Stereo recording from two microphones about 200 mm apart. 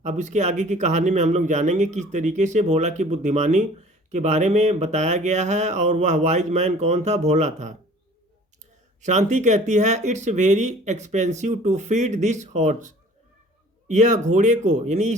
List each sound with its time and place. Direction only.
0.0 s speech: 35° right (ahead or behind)
9.0 s speech: 35° right (ahead or behind)